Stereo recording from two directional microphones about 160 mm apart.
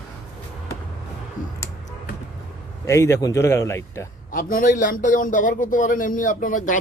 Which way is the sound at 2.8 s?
15° left (ahead or behind).